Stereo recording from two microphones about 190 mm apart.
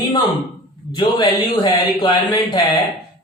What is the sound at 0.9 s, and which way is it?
Speech, 25° left (ahead or behind).